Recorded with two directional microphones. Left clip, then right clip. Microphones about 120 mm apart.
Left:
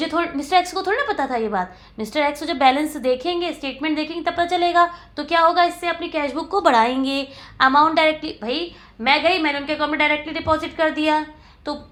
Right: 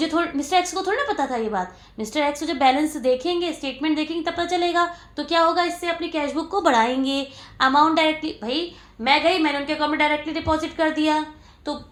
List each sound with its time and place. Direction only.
0.0 s a woman's voice: 35° left (ahead or behind)